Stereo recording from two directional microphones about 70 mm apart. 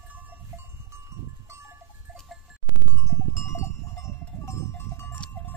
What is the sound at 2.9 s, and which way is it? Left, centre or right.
Goat, left.